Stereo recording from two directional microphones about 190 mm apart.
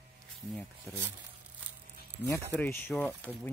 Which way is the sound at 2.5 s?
10° left (ahead or behind).